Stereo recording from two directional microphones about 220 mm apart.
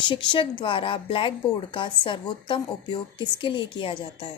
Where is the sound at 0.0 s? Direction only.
20° left (ahead or behind).